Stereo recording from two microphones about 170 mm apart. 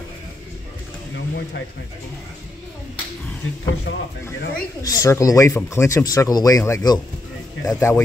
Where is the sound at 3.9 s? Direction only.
90° left.